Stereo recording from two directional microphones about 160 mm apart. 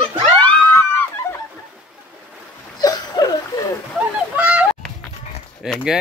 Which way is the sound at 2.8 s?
25° left (ahead or behind).